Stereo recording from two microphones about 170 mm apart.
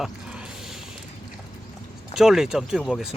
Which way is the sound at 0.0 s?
5° right (ahead or behind).